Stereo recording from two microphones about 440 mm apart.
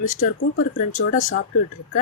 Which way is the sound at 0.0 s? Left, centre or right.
Centre.